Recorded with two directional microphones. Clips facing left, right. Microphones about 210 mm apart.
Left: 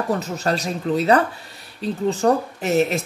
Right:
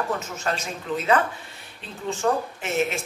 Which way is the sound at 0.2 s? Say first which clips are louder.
Left 6 dB; 35° left (ahead or behind).